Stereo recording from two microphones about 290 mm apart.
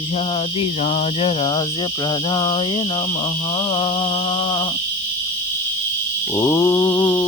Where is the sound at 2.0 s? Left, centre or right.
Centre.